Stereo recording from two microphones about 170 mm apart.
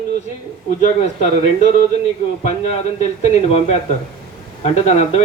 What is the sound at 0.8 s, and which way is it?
A man's voice, 40° left (ahead or behind).